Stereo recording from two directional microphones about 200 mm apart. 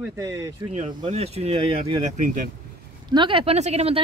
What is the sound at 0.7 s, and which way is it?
Speech, 35° right (ahead or behind).